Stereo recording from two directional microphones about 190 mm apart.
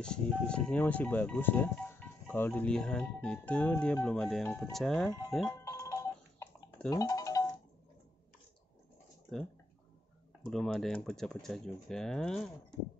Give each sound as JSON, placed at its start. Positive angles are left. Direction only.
{"t": 0.0, "sound": "speech", "side_deg": 5}
{"t": 5.6, "sound": "telephone", "side_deg": 15}
{"t": 6.9, "sound": "music", "side_deg": 20}
{"t": 10.4, "sound": "speech", "side_deg": 5}